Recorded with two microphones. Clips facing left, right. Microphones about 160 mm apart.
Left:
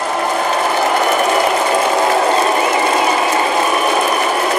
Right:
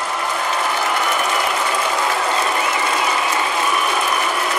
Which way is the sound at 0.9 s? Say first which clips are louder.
Left 6 dB; 45° left (ahead or behind).